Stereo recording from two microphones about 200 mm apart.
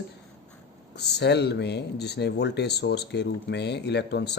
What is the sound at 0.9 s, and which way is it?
Speech, 55° left (ahead or behind).